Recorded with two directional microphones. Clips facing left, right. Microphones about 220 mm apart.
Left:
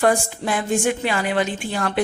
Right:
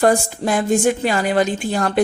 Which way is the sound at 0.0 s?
40° right (ahead or behind).